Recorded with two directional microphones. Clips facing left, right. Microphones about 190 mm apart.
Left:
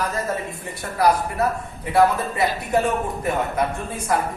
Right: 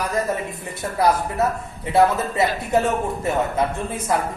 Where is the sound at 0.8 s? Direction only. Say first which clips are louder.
Even; 25° right (ahead or behind).